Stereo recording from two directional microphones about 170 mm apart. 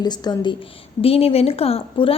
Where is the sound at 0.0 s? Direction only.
25° left (ahead or behind).